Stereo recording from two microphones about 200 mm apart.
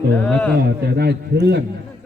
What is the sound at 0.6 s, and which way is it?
Speech, 50° right (ahead or behind).